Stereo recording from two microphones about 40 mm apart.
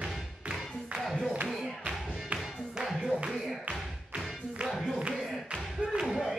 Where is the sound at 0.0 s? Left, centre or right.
Centre.